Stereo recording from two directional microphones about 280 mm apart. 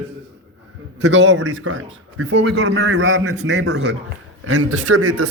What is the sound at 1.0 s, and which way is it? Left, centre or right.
A man's voice, right.